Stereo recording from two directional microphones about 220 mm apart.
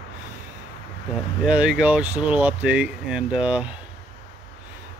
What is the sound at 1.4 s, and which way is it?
Speech, 5° right (ahead or behind).